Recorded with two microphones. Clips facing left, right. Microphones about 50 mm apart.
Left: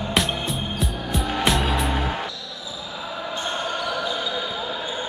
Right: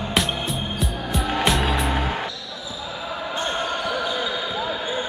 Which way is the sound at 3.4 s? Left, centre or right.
Centre.